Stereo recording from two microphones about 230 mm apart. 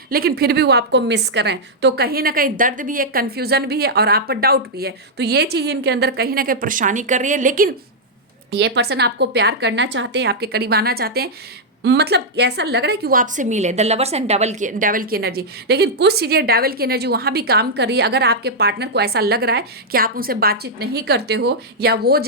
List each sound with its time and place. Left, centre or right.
0.1 s a woman's voice: right
8.5 s a woman's voice: right